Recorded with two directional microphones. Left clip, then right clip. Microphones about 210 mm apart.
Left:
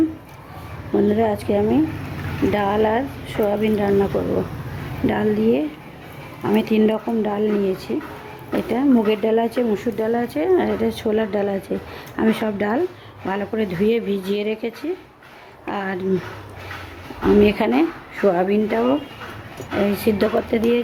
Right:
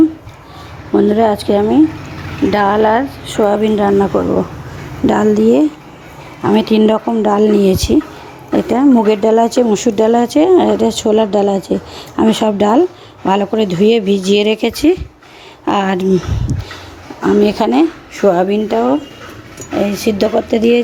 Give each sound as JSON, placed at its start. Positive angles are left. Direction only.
{"t": 0.9, "sound": "a woman's voice", "side_deg": -15}
{"t": 8.5, "sound": "speech", "side_deg": -20}
{"t": 17.4, "sound": "speech", "side_deg": -25}